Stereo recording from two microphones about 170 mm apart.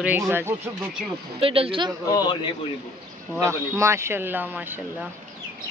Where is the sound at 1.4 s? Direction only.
35° right (ahead or behind).